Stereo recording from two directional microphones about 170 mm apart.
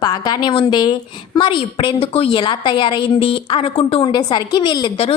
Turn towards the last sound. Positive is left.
turn(degrees=30)  # may be behind; listen again after turning